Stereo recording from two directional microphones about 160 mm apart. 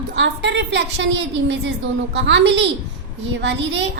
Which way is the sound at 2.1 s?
90° right.